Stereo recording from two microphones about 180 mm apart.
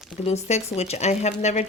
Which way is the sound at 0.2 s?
35° left (ahead or behind).